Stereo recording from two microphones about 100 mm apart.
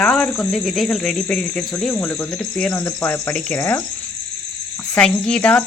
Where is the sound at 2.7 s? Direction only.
30° left (ahead or behind).